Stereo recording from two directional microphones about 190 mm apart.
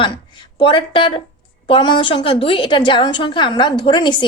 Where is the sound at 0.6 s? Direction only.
25° left (ahead or behind).